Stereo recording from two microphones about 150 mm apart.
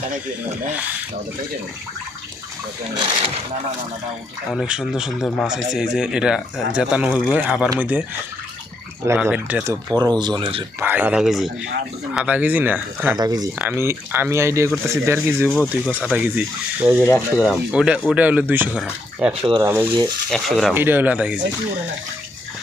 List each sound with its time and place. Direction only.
4.6 s speech: 5° right (ahead or behind)
9.1 s speech: 10° right (ahead or behind)
10.0 s speech: 30° right (ahead or behind)
10.8 s speech: 10° right (ahead or behind)
13.1 s speech: 25° right (ahead or behind)
13.6 s speech: 15° right (ahead or behind)
15.4 s speech: 5° right (ahead or behind)
19.4 s speech: 35° right (ahead or behind)
19.6 s speech: 15° right (ahead or behind)
20.3 s speech: centre (ahead or behind)
20.7 s speech: 15° right (ahead or behind)